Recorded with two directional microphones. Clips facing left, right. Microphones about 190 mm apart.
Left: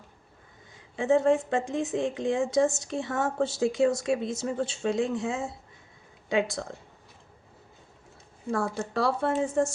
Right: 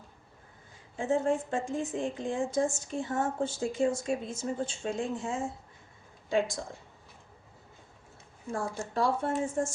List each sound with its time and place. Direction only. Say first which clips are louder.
0.9 s a woman's voice: left 6 dB; 75° left (ahead or behind)
8.4 s a woman's voice: left 5 dB; 70° left (ahead or behind)